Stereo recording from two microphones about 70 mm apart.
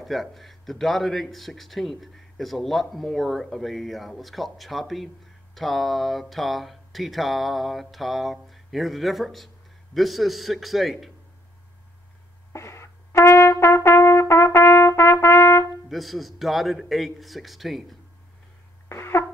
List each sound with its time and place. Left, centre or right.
0.0 s speech: centre
12.5 s trumpet: left
15.9 s speech: centre
18.9 s cough: left